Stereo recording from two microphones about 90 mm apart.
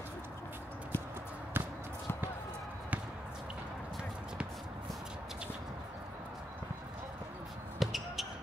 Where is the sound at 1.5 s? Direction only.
25° right (ahead or behind).